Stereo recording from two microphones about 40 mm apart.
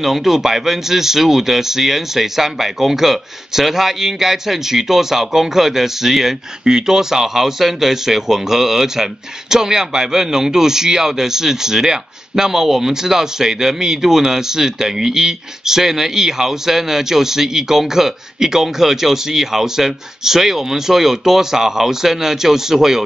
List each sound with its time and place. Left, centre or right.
0.0 s speech: centre